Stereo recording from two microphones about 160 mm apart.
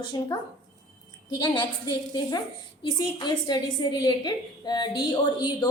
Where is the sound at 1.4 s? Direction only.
25° left (ahead or behind).